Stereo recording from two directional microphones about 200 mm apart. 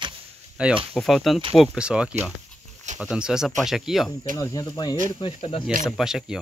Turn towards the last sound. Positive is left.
turn(degrees=0)  # may be behind; listen again after turning